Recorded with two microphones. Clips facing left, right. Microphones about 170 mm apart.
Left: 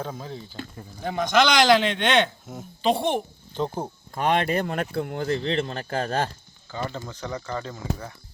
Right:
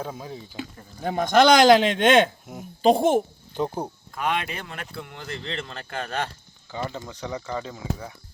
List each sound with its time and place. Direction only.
0.0 s speech: 10° right (ahead or behind)
1.0 s speech: 45° right (ahead or behind)
4.1 s speech: 35° left (ahead or behind)
6.7 s speech: 15° right (ahead or behind)